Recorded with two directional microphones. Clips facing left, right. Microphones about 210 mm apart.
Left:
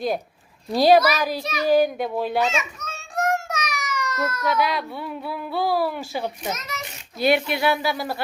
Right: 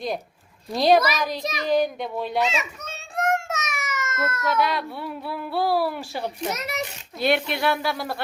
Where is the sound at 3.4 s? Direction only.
25° right (ahead or behind).